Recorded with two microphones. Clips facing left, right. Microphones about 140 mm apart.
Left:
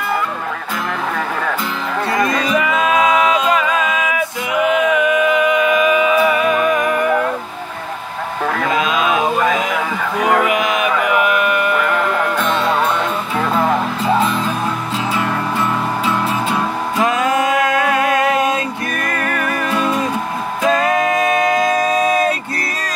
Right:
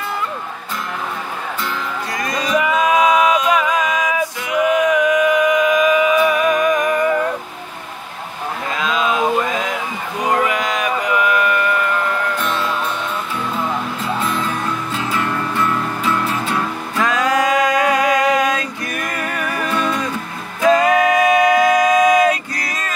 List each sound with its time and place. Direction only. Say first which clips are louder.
5.1 s a sound: even; 25° left (ahead or behind)
6.5 s music: even; 15° right (ahead or behind)
8.5 s a sound: left 4 dB; 90° left
10.5 s music: left 3 dB; 20° left (ahead or behind)
11.7 s music: left 2 dB; 90° left
12.6 s music: left 6 dB; 70° left (ahead or behind)
13.5 s music: left 8 dB; 90° left
17.0 s music: left 1 dB; 25° left (ahead or behind)
18.0 s music: even; 20° right (ahead or behind)
18.3 s music: left 1 dB; 25° left (ahead or behind)
19.0 s music: left 4 dB; 15° right (ahead or behind)
20.6 s music: right 3 dB; 25° left (ahead or behind)